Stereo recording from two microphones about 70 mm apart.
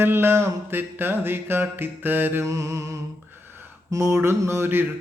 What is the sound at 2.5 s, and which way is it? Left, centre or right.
Music, right.